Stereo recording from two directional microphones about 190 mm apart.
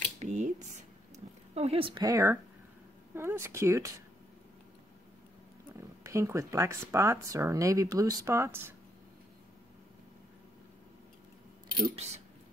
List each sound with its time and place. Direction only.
0.2 s a sound: 35° right (ahead or behind); by 2.3 s 15° right (ahead or behind)
3.2 s speech: 15° right (ahead or behind)
6.0 s speech: 15° right (ahead or behind)
11.9 s speech: 35° right (ahead or behind)